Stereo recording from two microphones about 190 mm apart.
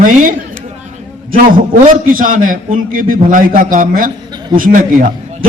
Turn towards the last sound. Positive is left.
turn(degrees=-45)  # may be behind; listen again after turning